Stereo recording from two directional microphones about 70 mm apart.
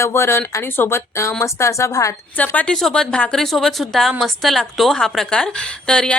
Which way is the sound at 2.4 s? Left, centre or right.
Left.